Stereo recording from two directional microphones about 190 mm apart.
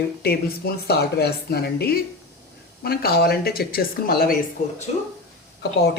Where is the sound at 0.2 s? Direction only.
55° left (ahead or behind).